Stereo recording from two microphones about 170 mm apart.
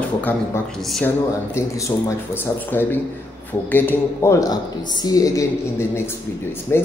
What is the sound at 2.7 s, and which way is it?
A woman's voice, 10° left (ahead or behind).